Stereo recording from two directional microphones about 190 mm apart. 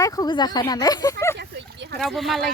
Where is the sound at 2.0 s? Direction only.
Centre (ahead or behind).